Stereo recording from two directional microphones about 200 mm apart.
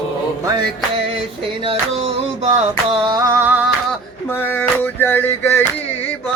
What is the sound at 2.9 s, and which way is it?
Music, 20° right (ahead or behind).